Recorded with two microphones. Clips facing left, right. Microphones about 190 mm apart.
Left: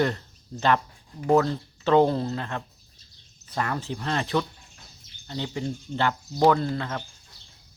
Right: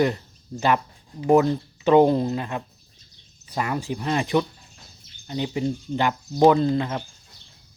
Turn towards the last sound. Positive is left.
turn(degrees=-20)  # may be behind; listen again after turning